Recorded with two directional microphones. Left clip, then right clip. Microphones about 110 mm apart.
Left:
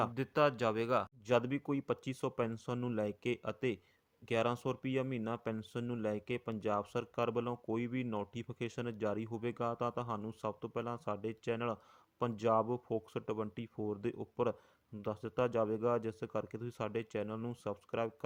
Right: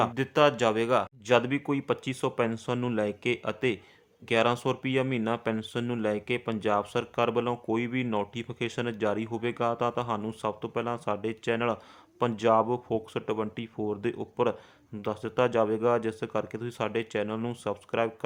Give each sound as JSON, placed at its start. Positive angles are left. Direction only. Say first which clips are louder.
{"t": 0.0, "sound": "speech", "louder": "right 9 dB", "side_deg": 40}